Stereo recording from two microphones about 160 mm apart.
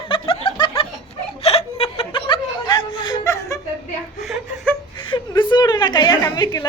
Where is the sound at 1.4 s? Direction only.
40° left (ahead or behind).